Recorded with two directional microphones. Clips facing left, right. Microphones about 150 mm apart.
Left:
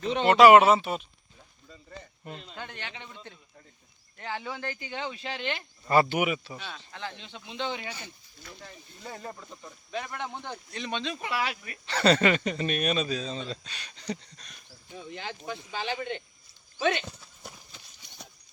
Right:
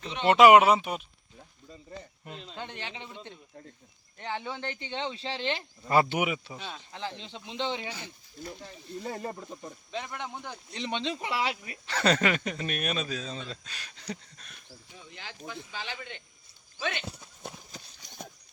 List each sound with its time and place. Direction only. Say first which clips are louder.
0.0 s speech: left 7 dB; 35° left (ahead or behind)
0.3 s speech: left 1 dB; 20° right (ahead or behind)
2.2 s speech: left 1 dB; centre (ahead or behind)
2.6 s speech: right 1 dB; 25° right (ahead or behind)
4.2 s speech: even; 20° right (ahead or behind)
5.9 s speech: left 1 dB; 15° right (ahead or behind)
9.0 s speech: right 4 dB; 40° right (ahead or behind)
9.3 s speech: right 4 dB; 25° right (ahead or behind)
11.9 s speech: left 3 dB; 5° right (ahead or behind)
15.4 s speech: left 5 dB; 50° left (ahead or behind)
16.7 s speech: left 7 dB; 25° left (ahead or behind)
17.7 s clip-clop: right 5 dB; 40° right (ahead or behind)